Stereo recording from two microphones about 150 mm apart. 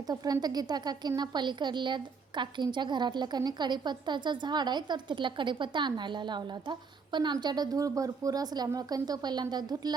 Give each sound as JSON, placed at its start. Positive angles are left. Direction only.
{"t": 0.1, "sound": "a woman's voice", "side_deg": -25}